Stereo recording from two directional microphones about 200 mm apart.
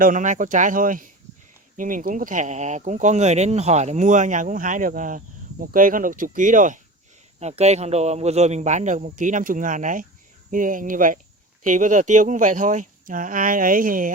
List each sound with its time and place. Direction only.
0.0 s speech: 40° right (ahead or behind)